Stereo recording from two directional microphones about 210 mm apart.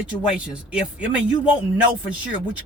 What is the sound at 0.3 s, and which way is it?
Speech, 5° right (ahead or behind).